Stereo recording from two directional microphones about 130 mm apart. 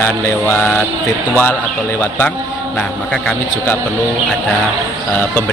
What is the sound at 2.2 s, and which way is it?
Speech, 5° left (ahead or behind).